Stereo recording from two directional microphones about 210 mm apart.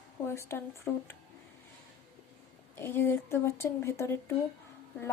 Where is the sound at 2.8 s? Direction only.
10° left (ahead or behind).